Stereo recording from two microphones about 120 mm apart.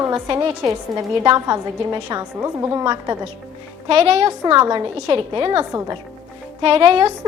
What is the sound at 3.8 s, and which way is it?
A woman's voice, 60° right (ahead or behind).